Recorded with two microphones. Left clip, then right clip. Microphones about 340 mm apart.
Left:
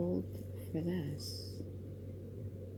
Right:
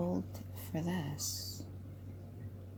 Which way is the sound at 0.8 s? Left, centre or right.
Right.